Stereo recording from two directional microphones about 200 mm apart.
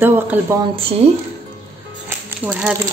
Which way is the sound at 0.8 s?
30° right (ahead or behind).